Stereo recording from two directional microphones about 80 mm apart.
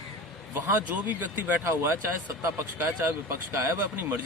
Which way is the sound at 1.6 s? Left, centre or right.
Right.